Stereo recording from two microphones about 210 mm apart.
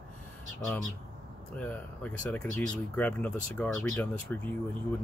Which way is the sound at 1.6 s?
5° left (ahead or behind).